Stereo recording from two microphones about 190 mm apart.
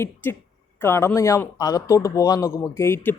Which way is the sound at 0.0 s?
10° left (ahead or behind).